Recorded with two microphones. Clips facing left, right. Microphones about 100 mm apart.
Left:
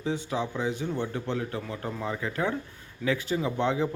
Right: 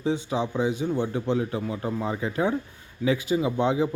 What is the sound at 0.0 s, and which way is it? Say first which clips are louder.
A man's voice: right 4 dB; 20° right (ahead or behind).